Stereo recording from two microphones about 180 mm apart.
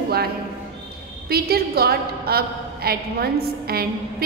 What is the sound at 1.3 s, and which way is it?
A woman's voice, 60° right (ahead or behind).